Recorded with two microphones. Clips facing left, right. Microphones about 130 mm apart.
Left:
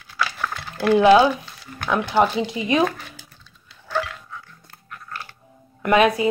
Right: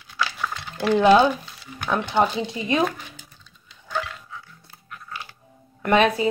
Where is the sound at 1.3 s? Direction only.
Centre (ahead or behind); by 2.8 s 20° left (ahead or behind).